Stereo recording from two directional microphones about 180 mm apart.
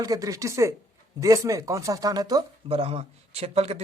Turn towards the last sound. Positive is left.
turn(degrees=-35)  # may be behind; listen again after turning